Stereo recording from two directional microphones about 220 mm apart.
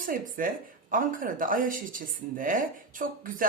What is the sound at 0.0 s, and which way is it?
Speech, 40° right (ahead or behind).